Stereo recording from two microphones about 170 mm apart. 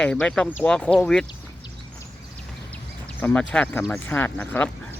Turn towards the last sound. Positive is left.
turn(degrees=10)  # may be behind; listen again after turning